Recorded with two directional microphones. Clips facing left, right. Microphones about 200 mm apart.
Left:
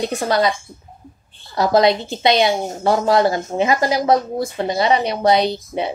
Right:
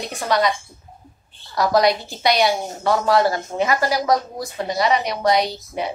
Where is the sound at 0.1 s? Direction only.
35° left (ahead or behind).